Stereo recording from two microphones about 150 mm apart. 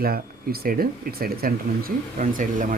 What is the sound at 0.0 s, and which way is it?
Speech, 85° right.